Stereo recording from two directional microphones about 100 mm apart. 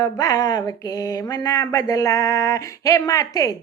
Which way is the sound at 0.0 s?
35° left (ahead or behind).